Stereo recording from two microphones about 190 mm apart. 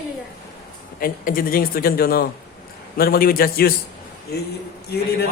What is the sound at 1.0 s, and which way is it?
A man's voice, 50° left (ahead or behind).